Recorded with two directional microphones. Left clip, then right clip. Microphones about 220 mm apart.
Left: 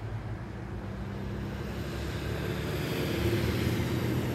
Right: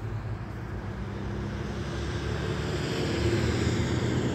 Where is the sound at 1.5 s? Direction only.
55° left (ahead or behind).